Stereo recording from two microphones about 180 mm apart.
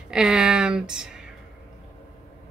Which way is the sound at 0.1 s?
5° right (ahead or behind).